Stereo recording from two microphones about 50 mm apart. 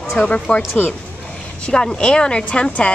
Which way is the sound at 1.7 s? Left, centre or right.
Centre.